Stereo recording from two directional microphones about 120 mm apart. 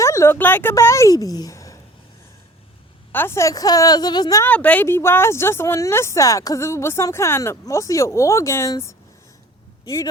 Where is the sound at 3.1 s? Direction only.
20° left (ahead or behind).